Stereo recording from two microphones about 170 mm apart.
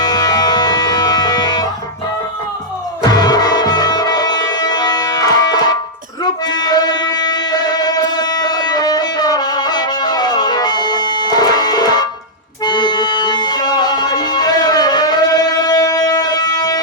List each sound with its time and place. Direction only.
0.0 s music: 25° left (ahead or behind)
3.0 s music: 25° left (ahead or behind)